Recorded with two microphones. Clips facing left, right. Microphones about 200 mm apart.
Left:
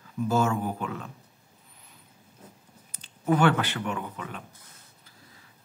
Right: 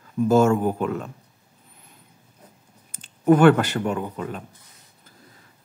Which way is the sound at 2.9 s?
50° right (ahead or behind).